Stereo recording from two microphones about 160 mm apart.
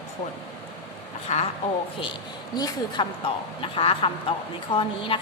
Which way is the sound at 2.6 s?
25° left (ahead or behind).